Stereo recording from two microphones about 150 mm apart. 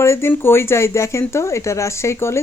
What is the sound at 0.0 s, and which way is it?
Speech, 15° left (ahead or behind).